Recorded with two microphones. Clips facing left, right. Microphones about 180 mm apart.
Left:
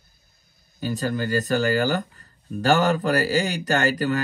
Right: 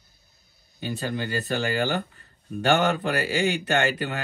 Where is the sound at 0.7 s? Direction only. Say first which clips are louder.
Left 4 dB; 40° left (ahead or behind).